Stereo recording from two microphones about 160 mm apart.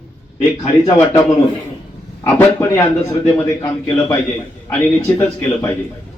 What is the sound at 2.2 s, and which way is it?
A man's voice, 10° left (ahead or behind).